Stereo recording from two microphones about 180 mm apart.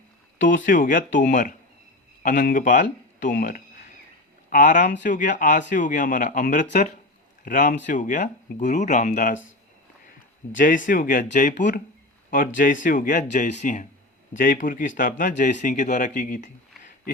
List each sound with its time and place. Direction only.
0.4 s speech: 50° left (ahead or behind)
10.5 s speech: 50° left (ahead or behind)